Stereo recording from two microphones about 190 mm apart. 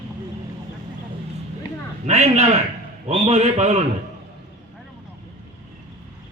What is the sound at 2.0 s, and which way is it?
A man's voice, 35° right (ahead or behind).